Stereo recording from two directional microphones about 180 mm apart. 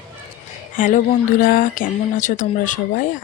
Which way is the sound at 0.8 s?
50° left (ahead or behind).